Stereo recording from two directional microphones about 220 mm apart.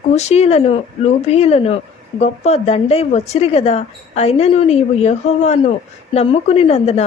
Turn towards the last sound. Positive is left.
turn(degrees=30)  # may be behind; listen again after turning